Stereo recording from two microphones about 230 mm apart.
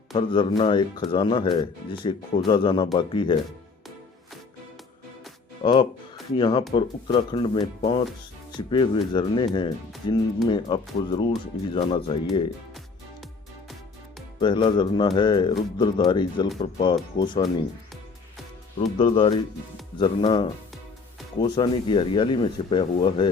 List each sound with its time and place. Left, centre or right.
0.1 s speech: left
5.6 s speech: left
14.4 s speech: left
18.8 s speech: left